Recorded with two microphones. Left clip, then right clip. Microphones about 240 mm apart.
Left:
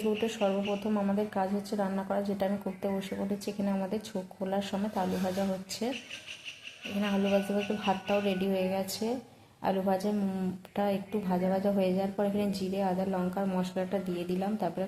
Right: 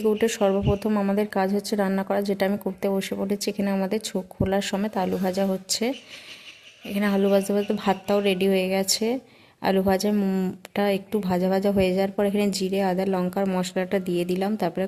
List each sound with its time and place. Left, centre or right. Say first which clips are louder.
0.2 s a woman's voice: right 8 dB; right
7.0 s a woman's voice: right 8 dB; right